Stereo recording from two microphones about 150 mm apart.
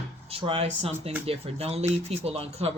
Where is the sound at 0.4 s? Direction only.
40° right (ahead or behind).